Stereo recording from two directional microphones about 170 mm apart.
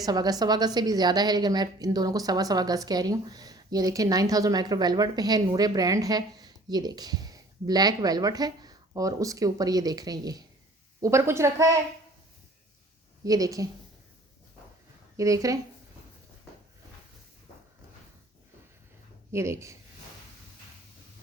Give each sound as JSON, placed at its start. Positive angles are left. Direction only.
{"t": 0.0, "sound": "a woman's voice", "side_deg": -20}
{"t": 13.2, "sound": "a woman's voice", "side_deg": -20}
{"t": 15.1, "sound": "speech", "side_deg": -20}
{"t": 19.3, "sound": "a woman's voice", "side_deg": -15}